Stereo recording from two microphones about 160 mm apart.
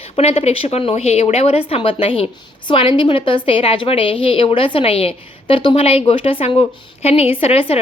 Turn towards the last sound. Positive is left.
turn(degrees=40)  # may be behind; listen again after turning